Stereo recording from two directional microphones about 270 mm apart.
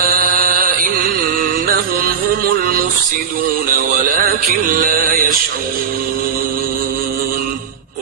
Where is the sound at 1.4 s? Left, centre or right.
Right.